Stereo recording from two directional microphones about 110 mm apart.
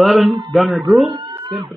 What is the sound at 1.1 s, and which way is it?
Cat, 40° right (ahead or behind).